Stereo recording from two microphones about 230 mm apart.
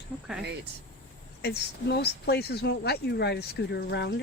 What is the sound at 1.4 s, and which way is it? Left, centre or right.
Speech, left.